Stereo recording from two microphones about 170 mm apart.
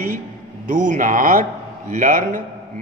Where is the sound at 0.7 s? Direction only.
50° right (ahead or behind).